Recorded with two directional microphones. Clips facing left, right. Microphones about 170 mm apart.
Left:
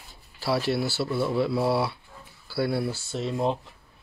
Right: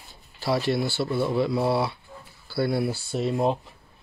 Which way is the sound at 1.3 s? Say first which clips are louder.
Even; 5° left (ahead or behind).